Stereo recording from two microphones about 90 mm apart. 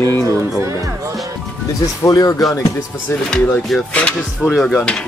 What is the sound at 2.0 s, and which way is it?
Speech, 40° left (ahead or behind).